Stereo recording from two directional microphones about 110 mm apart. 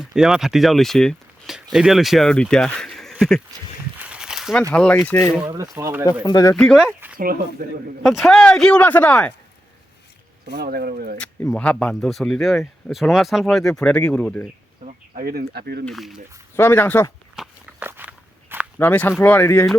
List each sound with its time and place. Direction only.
0.0 s speech: 5° right (ahead or behind)
4.0 s a sound: 10° right (ahead or behind)
4.7 s speech: 10° left (ahead or behind)
5.0 s speech: 20° left (ahead or behind)
5.5 s speech: 25° right (ahead or behind)
6.2 s speech: 35° left (ahead or behind)
6.7 s speech: 10° right (ahead or behind)
8.0 s speech: centre (ahead or behind)
11.5 s speech: 10° left (ahead or behind)
15.9 s speech: centre (ahead or behind)
16.6 s speech: 20° left (ahead or behind)
17.4 s walk: 5° right (ahead or behind)
17.7 s walk: 15° right (ahead or behind)
18.8 s speech: 20° left (ahead or behind)